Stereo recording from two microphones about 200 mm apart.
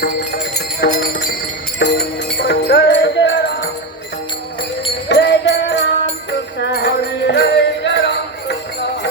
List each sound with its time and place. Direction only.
0.5 s jingle bell: 55° left (ahead or behind)
1.8 s music: 60° left (ahead or behind)
5.0 s music: 60° left (ahead or behind)